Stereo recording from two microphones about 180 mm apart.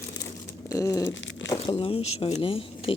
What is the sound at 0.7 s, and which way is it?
Speech, 20° left (ahead or behind).